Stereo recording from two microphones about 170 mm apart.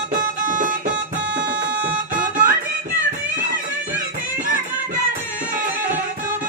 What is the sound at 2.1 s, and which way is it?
Music, 50° right (ahead or behind).